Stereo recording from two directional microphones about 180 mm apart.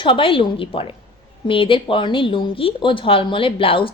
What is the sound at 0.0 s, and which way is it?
Speech, 30° left (ahead or behind).